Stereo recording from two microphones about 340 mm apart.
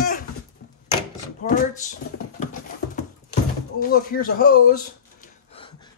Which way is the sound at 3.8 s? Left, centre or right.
Left.